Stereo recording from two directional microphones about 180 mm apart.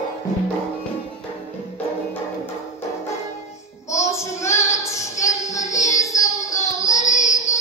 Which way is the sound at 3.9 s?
15° left (ahead or behind).